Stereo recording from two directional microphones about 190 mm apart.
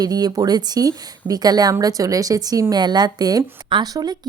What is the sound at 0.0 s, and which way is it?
A woman's voice, 20° right (ahead or behind).